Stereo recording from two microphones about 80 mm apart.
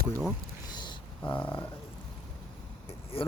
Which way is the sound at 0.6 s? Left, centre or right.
Left.